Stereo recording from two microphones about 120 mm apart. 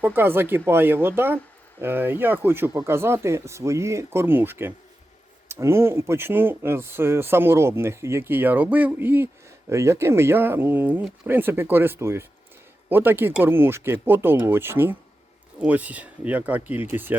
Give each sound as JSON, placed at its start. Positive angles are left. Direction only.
{"t": 0.0, "sound": "speech", "side_deg": -20}